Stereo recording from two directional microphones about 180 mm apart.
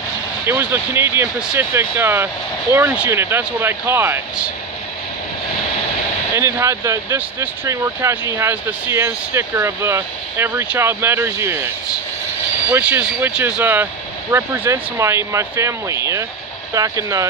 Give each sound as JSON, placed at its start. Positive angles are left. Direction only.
{"t": 0.5, "sound": "speech", "side_deg": -15}
{"t": 6.3, "sound": "speech", "side_deg": -15}